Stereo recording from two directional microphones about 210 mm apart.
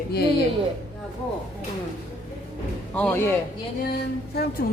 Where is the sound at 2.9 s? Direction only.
5° left (ahead or behind).